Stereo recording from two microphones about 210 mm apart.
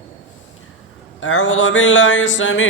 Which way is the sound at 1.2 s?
65° left (ahead or behind).